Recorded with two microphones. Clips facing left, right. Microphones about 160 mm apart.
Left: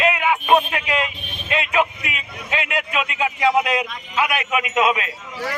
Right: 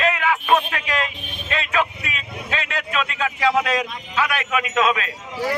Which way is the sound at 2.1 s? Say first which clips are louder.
Left 1 dB; 15° left (ahead or behind).